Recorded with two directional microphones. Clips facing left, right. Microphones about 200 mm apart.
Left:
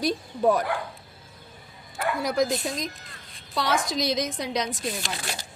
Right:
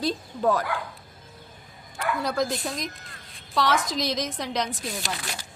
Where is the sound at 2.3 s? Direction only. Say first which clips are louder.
Left 2 dB; 20° left (ahead or behind).